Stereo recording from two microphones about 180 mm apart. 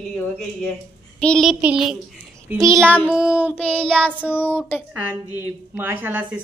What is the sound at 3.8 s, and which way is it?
Child singing, 5° left (ahead or behind).